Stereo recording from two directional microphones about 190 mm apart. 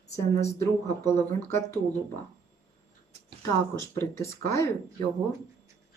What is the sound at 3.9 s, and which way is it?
Speech, 15° left (ahead or behind).